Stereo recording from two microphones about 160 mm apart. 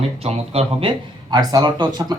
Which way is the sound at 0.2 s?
40° right (ahead or behind).